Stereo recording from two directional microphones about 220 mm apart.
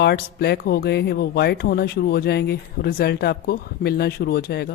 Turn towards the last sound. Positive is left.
turn(degrees=45)  # may be behind; listen again after turning